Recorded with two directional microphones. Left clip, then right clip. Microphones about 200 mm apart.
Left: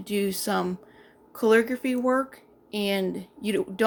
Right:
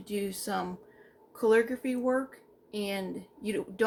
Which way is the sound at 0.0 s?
45° left (ahead or behind).